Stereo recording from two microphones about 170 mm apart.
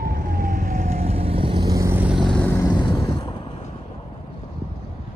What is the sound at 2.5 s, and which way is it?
Vehicle, 25° left (ahead or behind).